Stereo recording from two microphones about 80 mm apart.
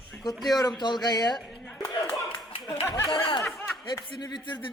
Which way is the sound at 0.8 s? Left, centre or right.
Left.